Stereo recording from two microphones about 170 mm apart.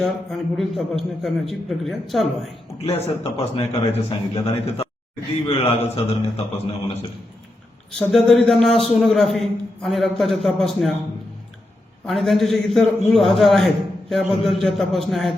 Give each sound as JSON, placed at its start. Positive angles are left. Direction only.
{"t": 0.0, "sound": "a man's voice", "side_deg": 0}
{"t": 2.8, "sound": "a man's voice", "side_deg": 35}
{"t": 7.9, "sound": "a man's voice", "side_deg": 0}
{"t": 12.0, "sound": "a man's voice", "side_deg": 0}